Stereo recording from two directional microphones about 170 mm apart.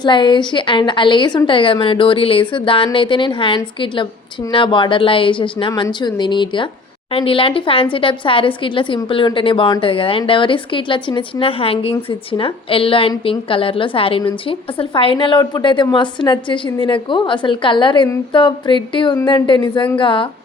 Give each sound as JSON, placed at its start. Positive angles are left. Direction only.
{"t": 0.0, "sound": "a woman's voice", "side_deg": 25}